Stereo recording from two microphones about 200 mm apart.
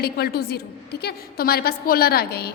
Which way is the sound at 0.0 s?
50° left (ahead or behind).